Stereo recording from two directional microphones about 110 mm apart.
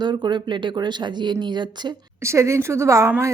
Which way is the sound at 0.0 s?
45° right (ahead or behind).